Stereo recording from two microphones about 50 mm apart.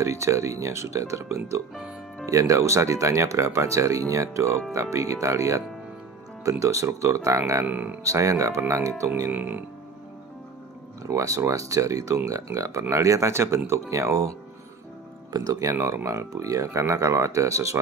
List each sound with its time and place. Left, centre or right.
0.0 s speech: right
6.6 s speech: right
7.6 s speech: right
8.0 s speech: right
9.3 s speech: right
11.1 s speech: right
15.7 s speech: right